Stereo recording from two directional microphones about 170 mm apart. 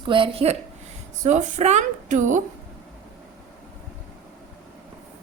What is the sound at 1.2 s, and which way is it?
A woman's voice, 45° right (ahead or behind).